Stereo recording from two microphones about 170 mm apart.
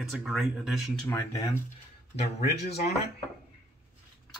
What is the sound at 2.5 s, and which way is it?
Speech, 70° left (ahead or behind).